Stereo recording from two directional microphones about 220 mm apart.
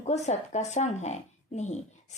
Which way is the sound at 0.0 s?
30° left (ahead or behind).